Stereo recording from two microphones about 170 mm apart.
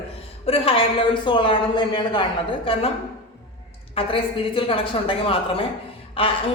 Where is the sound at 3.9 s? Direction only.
30° left (ahead or behind).